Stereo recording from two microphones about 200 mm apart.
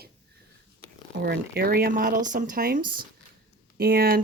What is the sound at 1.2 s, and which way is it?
Speech, 50° right (ahead or behind).